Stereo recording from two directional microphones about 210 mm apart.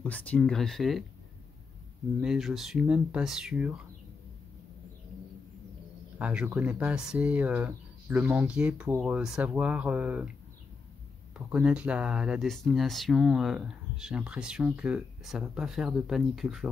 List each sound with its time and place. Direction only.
0.0 s speech: 5° left (ahead or behind)
2.2 s speech: centre (ahead or behind)
6.1 s speech: 5° right (ahead or behind)
11.3 s speech: 5° right (ahead or behind)